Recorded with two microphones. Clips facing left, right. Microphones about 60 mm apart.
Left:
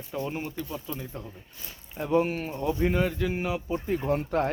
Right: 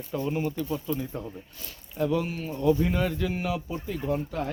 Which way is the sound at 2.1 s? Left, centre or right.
Left.